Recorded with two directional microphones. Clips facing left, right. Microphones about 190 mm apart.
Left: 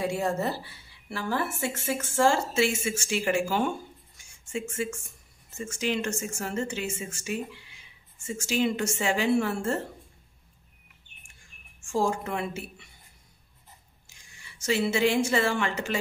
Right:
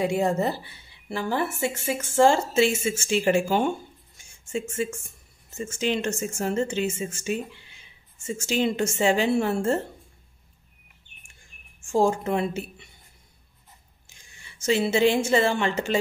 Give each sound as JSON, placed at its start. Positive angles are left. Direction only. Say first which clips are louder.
{"t": 0.0, "sound": "a woman's voice", "louder": "right 4 dB", "side_deg": -20}
{"t": 5.7, "sound": "a woman's voice", "louder": "right 3 dB", "side_deg": -25}
{"t": 11.8, "sound": "a woman's voice", "louder": "right 5 dB", "side_deg": -20}
{"t": 14.6, "sound": "a woman's voice", "louder": "right 4 dB", "side_deg": -25}